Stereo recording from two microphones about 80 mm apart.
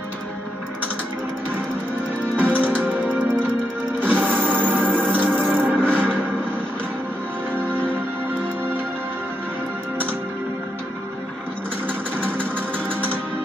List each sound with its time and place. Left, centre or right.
2.3 s music: right
4.0 s music: right
12.2 s music: right